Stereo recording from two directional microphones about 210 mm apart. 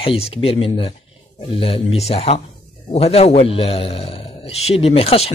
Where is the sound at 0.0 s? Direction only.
25° left (ahead or behind).